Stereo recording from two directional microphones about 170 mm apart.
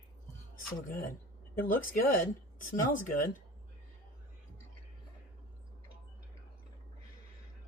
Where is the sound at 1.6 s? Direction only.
55° left (ahead or behind).